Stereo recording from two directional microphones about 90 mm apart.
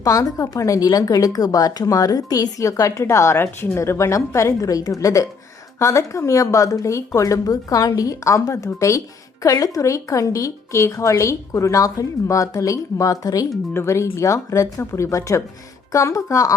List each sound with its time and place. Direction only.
0.0 s a woman's voice: 40° left (ahead or behind)